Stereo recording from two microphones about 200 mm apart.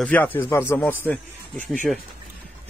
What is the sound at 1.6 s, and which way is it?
Speech, 40° right (ahead or behind).